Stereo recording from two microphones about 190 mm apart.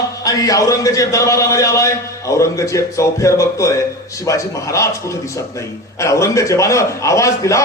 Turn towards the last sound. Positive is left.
turn(degrees=15)  # may be behind; listen again after turning